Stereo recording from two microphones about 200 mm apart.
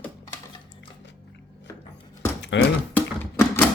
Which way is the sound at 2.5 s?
65° left (ahead or behind).